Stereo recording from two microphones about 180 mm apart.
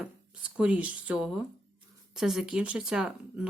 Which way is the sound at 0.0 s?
5° right (ahead or behind).